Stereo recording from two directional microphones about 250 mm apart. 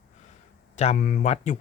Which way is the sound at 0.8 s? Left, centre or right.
Left.